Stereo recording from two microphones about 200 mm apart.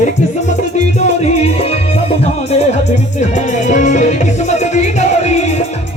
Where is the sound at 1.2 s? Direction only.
35° left (ahead or behind).